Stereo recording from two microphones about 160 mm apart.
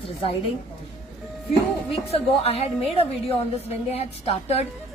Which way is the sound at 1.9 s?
40° left (ahead or behind).